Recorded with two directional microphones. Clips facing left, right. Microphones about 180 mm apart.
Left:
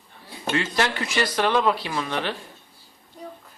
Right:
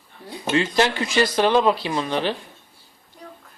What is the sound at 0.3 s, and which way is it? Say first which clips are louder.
Speech: right 4 dB; 20° right (ahead or behind).